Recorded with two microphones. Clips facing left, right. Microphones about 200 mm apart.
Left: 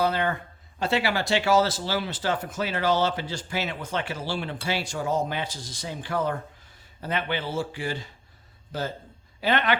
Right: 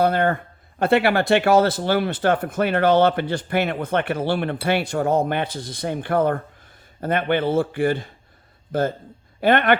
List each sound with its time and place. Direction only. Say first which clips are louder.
0.0 s speech: right 6 dB; 55° right (ahead or behind)
9.4 s speech: right 7 dB; 55° right (ahead or behind)